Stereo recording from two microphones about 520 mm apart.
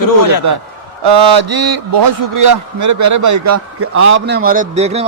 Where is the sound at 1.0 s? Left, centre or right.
Right.